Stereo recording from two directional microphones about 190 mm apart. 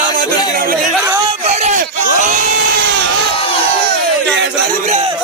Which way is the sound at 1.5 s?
35° right (ahead or behind).